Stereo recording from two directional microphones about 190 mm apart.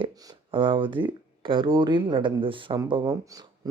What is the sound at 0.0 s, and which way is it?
Speech, 25° right (ahead or behind).